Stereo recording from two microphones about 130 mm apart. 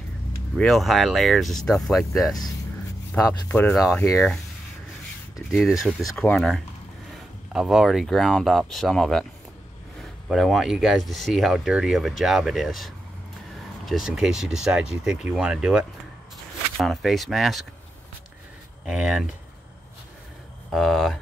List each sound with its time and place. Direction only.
0.6 s speech: centre (ahead or behind)
3.2 s speech: 25° left (ahead or behind)
5.5 s speech: centre (ahead or behind)
10.2 s speech: centre (ahead or behind)
18.9 s speech: 5° right (ahead or behind)
20.7 s speech: centre (ahead or behind)